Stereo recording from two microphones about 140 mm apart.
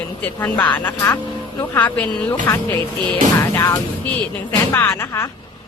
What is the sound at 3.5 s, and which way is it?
Music, 20° left (ahead or behind).